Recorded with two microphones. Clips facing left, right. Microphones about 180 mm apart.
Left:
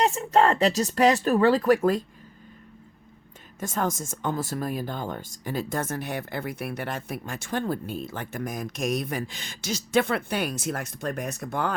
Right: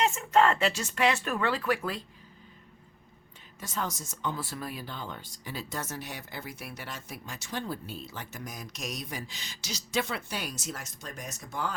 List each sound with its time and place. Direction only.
0.0 s speech: 35° left (ahead or behind)
3.6 s speech: 50° left (ahead or behind)